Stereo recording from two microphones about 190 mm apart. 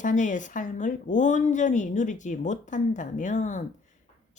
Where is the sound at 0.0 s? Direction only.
40° left (ahead or behind).